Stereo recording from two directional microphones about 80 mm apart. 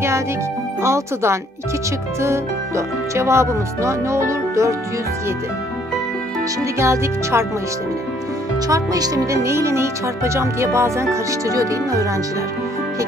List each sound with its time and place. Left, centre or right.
0.8 s speech: right
6.8 s speech: right
8.6 s speech: right